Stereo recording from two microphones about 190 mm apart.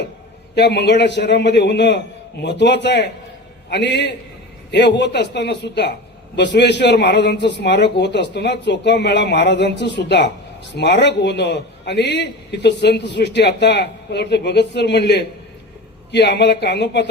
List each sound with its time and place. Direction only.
0.5 s a man's voice: 65° left (ahead or behind)